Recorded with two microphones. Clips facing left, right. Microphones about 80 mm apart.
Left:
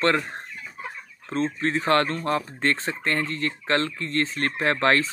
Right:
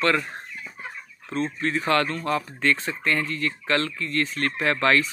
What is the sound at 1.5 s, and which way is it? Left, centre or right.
Speech, left.